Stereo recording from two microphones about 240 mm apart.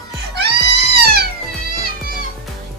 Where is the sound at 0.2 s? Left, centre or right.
Right.